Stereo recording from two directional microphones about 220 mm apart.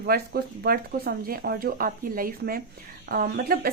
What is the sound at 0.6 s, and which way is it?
A woman's voice, 45° right (ahead or behind).